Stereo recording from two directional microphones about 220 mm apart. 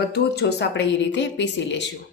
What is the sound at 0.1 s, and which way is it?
A woman's voice, 50° left (ahead or behind).